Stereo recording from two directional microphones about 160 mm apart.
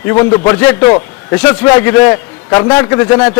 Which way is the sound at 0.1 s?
20° left (ahead or behind).